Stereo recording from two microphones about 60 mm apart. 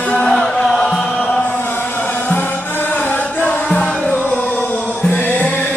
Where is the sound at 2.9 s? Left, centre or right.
Left.